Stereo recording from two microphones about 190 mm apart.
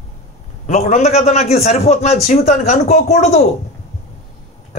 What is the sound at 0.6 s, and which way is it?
Speech, 35° left (ahead or behind).